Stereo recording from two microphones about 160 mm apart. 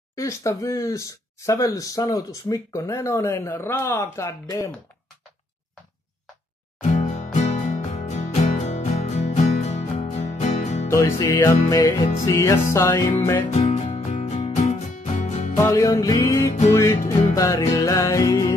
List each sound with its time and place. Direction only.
0.1 s speech: 20° left (ahead or behind)
6.8 s music: 45° left (ahead or behind)
10.9 s speech: 20° left (ahead or behind)
13.5 s music: 40° left (ahead or behind)
15.5 s speech: 20° left (ahead or behind)
16.7 s music: 20° left (ahead or behind)